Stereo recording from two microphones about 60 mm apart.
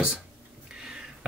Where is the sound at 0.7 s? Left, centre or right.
Centre.